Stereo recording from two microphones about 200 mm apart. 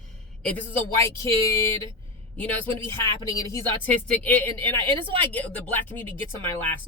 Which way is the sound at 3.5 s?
15° left (ahead or behind).